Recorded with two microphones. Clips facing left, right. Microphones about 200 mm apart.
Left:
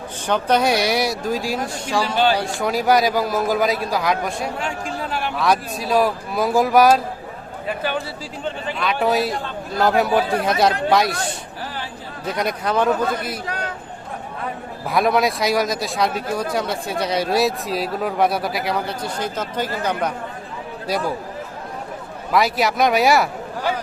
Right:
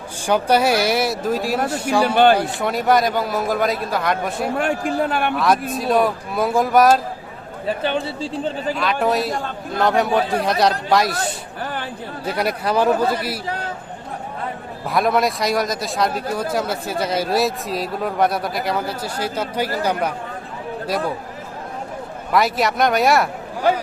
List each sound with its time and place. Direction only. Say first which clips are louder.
0.3 s speech: right 2 dB; 10° right (ahead or behind)
2.1 s a man's voice: right 5 dB; 55° right (ahead or behind)
2.6 s speech: even; centre (ahead or behind)
4.5 s a man's voice: right 7 dB; 55° right (ahead or behind)
5.4 s speech: left 2 dB; centre (ahead or behind)
7.7 s a man's voice: right 3 dB; 25° right (ahead or behind)
8.7 s speech: left 1 dB; centre (ahead or behind)
11.6 s a sound: right 4 dB; 55° right (ahead or behind)
12.2 s speech: right 1 dB; 5° right (ahead or behind)
14.8 s speech: even; centre (ahead or behind)
22.3 s speech: even; centre (ahead or behind)